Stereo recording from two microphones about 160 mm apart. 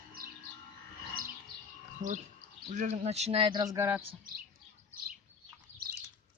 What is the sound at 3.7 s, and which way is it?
Speech, 15° right (ahead or behind).